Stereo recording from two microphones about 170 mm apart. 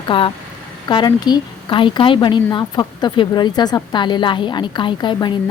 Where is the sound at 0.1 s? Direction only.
30° left (ahead or behind).